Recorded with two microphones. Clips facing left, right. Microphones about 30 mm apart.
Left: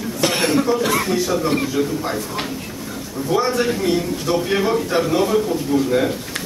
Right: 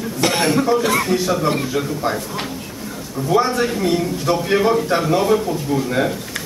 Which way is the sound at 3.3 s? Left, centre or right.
Centre.